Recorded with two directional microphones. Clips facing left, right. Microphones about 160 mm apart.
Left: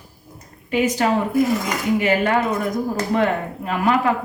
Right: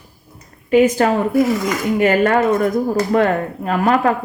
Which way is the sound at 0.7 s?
45° right (ahead or behind).